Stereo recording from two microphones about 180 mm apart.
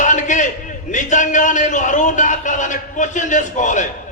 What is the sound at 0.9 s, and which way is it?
A man's voice, 45° left (ahead or behind).